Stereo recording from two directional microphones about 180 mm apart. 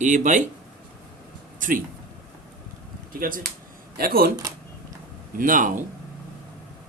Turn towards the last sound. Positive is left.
turn(degrees=-50)  # may be behind; listen again after turning